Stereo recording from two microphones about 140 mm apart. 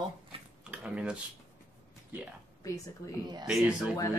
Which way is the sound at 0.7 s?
5° right (ahead or behind).